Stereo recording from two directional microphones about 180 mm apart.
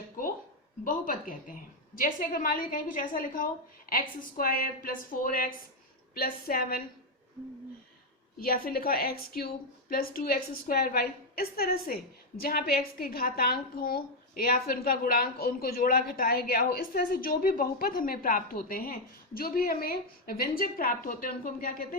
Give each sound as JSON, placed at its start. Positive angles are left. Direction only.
{"t": 0.9, "sound": "a woman's voice", "side_deg": 50}
{"t": 8.4, "sound": "a woman's voice", "side_deg": 55}